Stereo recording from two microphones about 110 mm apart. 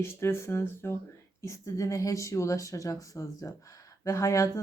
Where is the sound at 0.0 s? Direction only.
25° left (ahead or behind).